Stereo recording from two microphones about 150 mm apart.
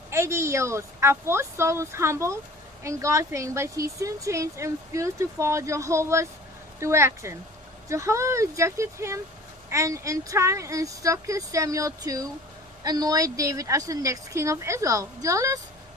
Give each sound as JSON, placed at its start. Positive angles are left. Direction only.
{"t": 0.1, "sound": "a woman's voice", "side_deg": -20}